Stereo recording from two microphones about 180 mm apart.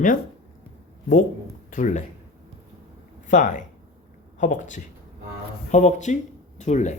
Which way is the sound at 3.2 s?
45° left (ahead or behind).